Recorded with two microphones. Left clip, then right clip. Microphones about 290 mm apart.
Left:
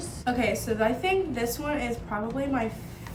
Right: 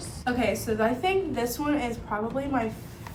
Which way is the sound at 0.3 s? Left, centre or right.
Centre.